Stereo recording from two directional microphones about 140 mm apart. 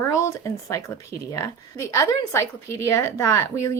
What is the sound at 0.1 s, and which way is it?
A woman's voice, 20° left (ahead or behind).